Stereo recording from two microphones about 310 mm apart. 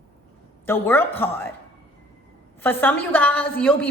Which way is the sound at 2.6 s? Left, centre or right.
Centre.